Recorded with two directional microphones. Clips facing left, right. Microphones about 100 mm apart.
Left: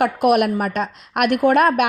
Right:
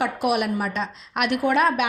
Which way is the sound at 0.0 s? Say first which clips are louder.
Left 7 dB; 50° left (ahead or behind).